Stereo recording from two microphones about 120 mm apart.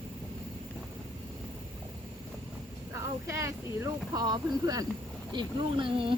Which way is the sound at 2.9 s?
25° right (ahead or behind).